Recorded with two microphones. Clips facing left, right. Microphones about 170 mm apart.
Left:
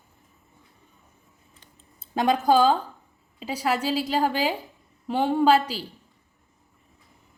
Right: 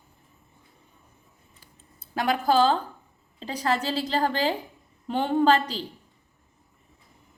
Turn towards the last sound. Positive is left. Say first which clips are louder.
# left 1 dB
turn(degrees=10)  # may be behind; listen again after turning